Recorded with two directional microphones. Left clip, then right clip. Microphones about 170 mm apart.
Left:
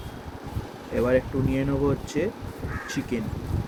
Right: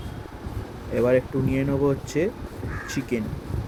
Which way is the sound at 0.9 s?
25° right (ahead or behind).